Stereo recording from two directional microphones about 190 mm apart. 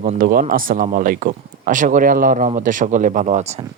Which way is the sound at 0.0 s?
45° right (ahead or behind).